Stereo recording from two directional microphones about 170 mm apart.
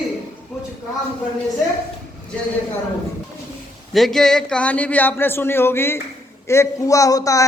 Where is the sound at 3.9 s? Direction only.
Centre (ahead or behind).